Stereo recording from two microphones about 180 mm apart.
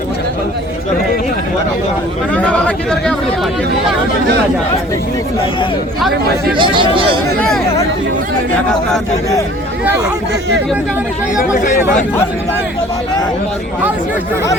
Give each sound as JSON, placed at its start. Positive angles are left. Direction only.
{"t": 2.3, "sound": "speech", "side_deg": 5}
{"t": 6.6, "sound": "speech", "side_deg": -25}
{"t": 11.5, "sound": "speech", "side_deg": 45}